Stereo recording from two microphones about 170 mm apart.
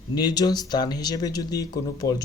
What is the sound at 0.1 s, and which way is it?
Speech, 25° left (ahead or behind).